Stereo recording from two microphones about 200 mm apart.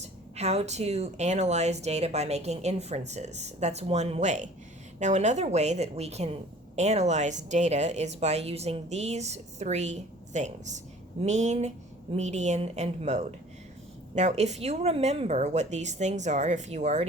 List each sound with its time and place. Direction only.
0.3 s speech: 35° right (ahead or behind)